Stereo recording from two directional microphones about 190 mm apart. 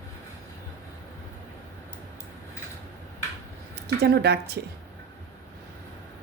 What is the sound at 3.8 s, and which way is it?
Speech, 60° right (ahead or behind).